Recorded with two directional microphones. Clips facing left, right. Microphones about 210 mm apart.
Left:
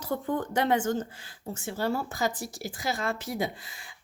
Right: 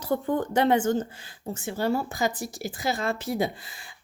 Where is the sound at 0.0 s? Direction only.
30° right (ahead or behind).